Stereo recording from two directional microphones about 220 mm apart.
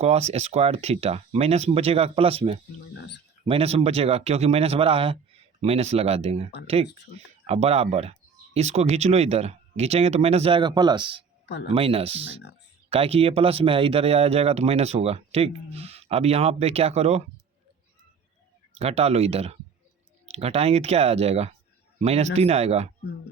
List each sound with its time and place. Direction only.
0.0 s a man's voice: 30° right (ahead or behind)
18.7 s a man's voice: 30° right (ahead or behind)